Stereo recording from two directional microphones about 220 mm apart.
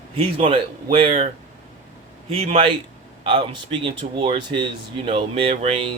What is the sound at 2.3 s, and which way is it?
Speech, 25° right (ahead or behind).